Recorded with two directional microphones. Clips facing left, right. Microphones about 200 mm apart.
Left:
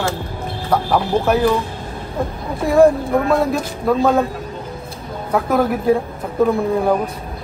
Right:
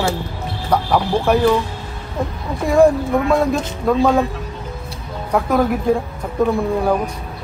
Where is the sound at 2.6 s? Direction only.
Centre (ahead or behind).